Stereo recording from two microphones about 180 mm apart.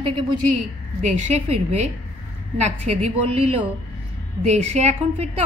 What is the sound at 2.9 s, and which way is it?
Speech, 35° right (ahead or behind).